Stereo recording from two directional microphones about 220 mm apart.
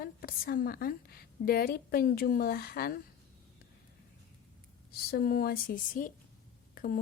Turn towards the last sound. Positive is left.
turn(degrees=40)  # may be behind; listen again after turning